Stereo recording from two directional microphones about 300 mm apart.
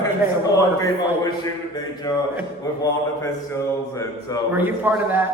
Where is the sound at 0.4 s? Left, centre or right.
Centre.